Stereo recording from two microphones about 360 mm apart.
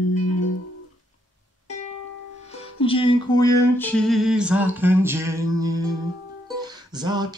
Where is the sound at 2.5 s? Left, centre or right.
Centre.